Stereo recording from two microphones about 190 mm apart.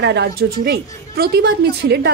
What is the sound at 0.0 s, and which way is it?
A woman's voice, 60° right (ahead or behind).